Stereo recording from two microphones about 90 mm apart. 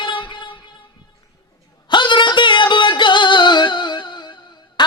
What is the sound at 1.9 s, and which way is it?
Music, 60° left (ahead or behind).